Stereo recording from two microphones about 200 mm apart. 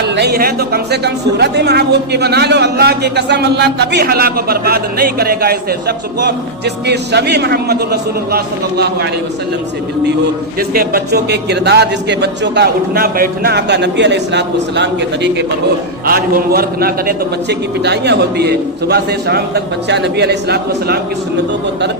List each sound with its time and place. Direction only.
0.0 s speech: 55° right (ahead or behind)
6.8 s speech: 55° right (ahead or behind)
10.8 s speech: 50° right (ahead or behind)
16.0 s speech: 50° right (ahead or behind)